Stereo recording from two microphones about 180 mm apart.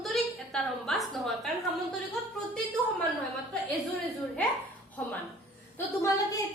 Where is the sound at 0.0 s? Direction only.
Centre (ahead or behind).